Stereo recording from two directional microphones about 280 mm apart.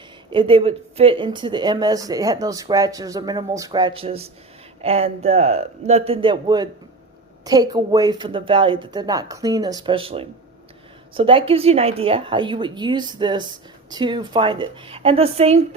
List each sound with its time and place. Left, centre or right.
0.3 s speech: centre